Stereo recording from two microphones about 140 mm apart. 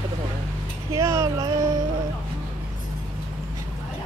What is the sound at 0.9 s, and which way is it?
Speech, 20° right (ahead or behind).